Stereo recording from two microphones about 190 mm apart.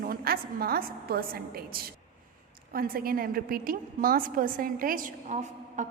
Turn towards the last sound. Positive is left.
turn(degrees=-40)  # may be behind; listen again after turning